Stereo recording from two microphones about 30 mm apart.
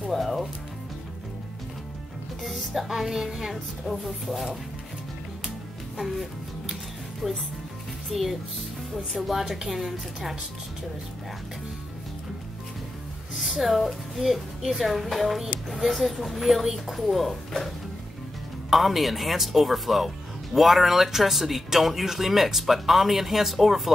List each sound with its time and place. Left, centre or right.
0.1 s music: centre
2.4 s music: centre
3.0 s speech: centre
3.3 s a woman's voice: right
3.8 s a woman's voice: centre
5.9 s speech: centre
7.2 s speech: centre
8.1 s a woman's voice: centre
13.3 s a woman's voice: centre
18.7 s a woman's voice: centre